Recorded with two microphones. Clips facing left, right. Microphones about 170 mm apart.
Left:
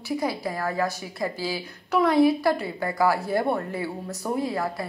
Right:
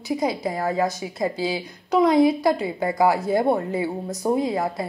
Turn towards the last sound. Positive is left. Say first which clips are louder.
# right 4 dB
turn(degrees=-20)  # may be behind; listen again after turning